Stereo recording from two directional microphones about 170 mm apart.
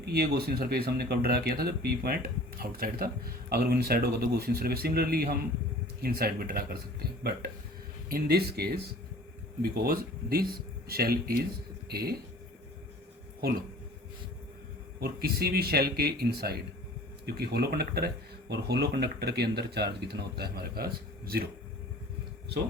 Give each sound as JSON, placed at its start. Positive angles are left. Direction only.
{"t": 0.0, "sound": "speech", "side_deg": -65}
{"t": 8.1, "sound": "speech", "side_deg": -65}
{"t": 15.0, "sound": "speech", "side_deg": -65}